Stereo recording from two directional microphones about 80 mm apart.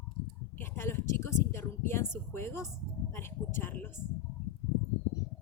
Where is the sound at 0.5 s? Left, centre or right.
Left.